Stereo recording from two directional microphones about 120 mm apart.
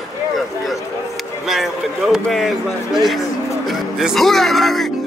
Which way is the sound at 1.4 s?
Centre (ahead or behind).